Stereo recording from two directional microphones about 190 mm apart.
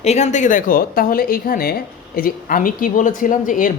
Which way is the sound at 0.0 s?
35° left (ahead or behind).